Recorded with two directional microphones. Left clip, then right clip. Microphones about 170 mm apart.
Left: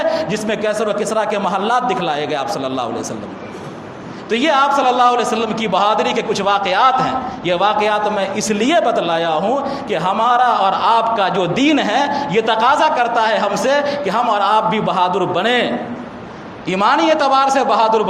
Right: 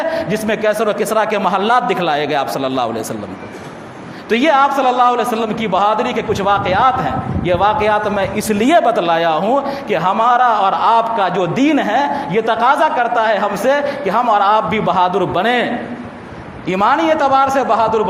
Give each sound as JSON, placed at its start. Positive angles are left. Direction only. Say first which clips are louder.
{"t": 0.0, "sound": "a man's voice", "louder": "even", "side_deg": -35}
{"t": 4.3, "sound": "a man's voice", "louder": "right 2 dB", "side_deg": -35}